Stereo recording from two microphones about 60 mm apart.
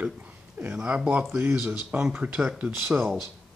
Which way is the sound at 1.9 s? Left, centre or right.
Centre.